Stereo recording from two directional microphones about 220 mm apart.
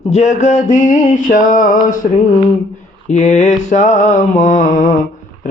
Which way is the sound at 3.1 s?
35° left (ahead or behind).